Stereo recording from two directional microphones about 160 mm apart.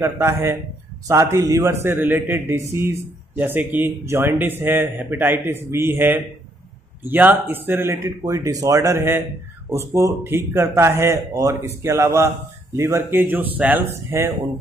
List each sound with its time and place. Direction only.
0.0 s a man's voice: 15° right (ahead or behind)